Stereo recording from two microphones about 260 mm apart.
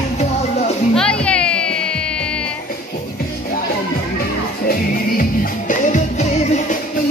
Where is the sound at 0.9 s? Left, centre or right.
Centre.